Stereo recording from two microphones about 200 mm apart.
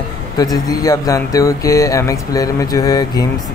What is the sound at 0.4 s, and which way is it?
Speech, 20° left (ahead or behind).